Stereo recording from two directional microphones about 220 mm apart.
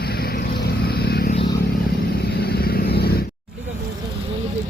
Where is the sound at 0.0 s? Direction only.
45° left (ahead or behind).